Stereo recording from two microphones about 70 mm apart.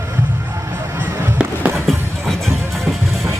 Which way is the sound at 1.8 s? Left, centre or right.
Centre.